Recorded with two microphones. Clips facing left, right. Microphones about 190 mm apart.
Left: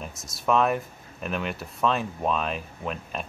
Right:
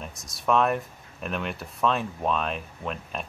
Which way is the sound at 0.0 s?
Centre (ahead or behind).